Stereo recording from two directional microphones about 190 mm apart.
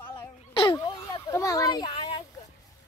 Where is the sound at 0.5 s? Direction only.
25° left (ahead or behind).